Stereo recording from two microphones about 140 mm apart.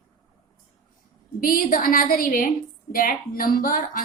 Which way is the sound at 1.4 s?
90° left.